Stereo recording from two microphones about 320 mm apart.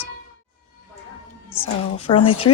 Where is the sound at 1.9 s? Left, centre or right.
Centre.